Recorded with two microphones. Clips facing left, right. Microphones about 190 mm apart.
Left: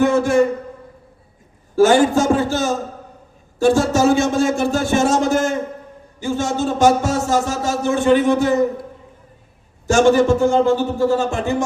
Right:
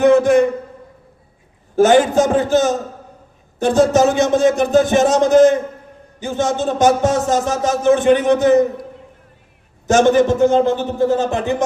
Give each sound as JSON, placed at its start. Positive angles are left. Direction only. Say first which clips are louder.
{"t": 0.0, "sound": "speech", "louder": "right 3 dB", "side_deg": -20}
{"t": 1.7, "sound": "speech", "louder": "right 1 dB", "side_deg": -20}
{"t": 9.8, "sound": "speech", "louder": "right 1 dB", "side_deg": -20}